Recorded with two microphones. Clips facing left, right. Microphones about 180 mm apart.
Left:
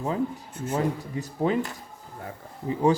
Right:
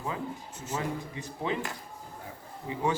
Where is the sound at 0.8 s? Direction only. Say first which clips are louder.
Left 7 dB; 40° left (ahead or behind).